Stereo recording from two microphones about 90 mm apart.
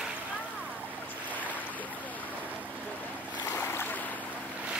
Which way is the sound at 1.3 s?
20° left (ahead or behind).